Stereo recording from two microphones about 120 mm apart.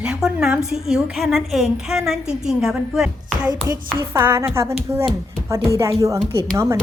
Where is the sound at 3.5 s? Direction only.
35° right (ahead or behind).